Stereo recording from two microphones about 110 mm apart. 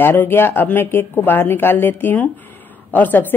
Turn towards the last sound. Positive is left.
turn(degrees=15)  # may be behind; listen again after turning